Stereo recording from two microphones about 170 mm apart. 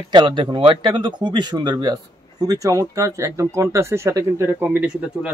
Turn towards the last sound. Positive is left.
turn(degrees=-10)  # may be behind; listen again after turning